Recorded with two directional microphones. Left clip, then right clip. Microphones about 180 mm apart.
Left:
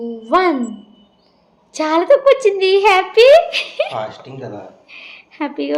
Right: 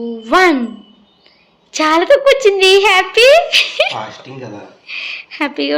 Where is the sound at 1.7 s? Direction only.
Centre (ahead or behind).